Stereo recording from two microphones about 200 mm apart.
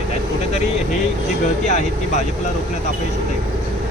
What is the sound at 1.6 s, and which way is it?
Speech, 35° left (ahead or behind).